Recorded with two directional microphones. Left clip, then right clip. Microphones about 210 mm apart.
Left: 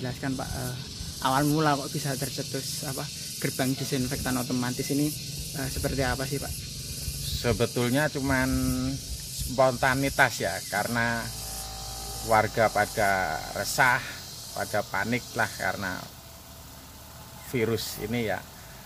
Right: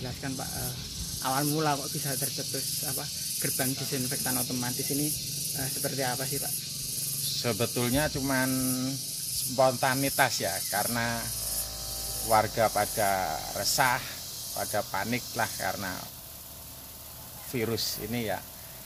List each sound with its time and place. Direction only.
0.0 s speech: 35° left (ahead or behind)
1.5 s speech: 30° left (ahead or behind)
7.4 s speech: 5° left (ahead or behind)
12.3 s speech: 5° left (ahead or behind)
17.5 s speech: 10° left (ahead or behind)